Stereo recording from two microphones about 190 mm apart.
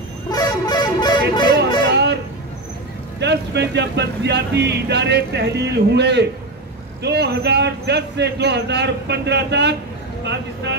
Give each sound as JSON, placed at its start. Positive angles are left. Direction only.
{"t": 0.3, "sound": "vehicle horn", "side_deg": 20}
{"t": 1.9, "sound": "guitar", "side_deg": -65}
{"t": 3.2, "sound": "speech", "side_deg": -65}